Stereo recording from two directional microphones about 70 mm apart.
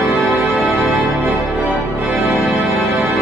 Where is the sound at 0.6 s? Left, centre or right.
Right.